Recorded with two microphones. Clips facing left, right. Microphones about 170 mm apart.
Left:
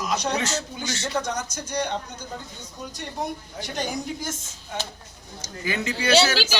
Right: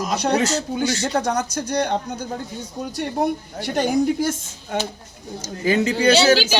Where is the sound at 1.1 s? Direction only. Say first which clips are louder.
Right 6 dB; 60° right (ahead or behind).